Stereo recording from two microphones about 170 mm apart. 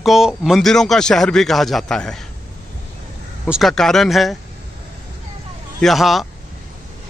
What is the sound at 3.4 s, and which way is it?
Speech, centre (ahead or behind).